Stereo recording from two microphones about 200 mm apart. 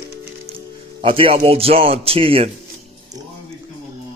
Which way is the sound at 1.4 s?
30° right (ahead or behind).